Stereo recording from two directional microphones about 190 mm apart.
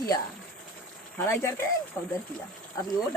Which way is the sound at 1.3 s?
15° left (ahead or behind).